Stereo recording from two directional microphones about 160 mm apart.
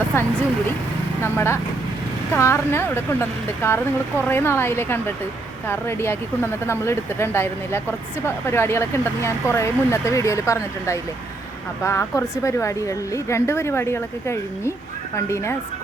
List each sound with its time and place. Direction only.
0.1 s a woman's voice: 15° left (ahead or behind)